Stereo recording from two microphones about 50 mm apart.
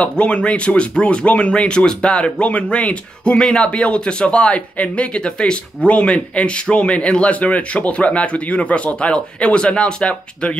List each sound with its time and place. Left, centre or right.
0.0 s speech: left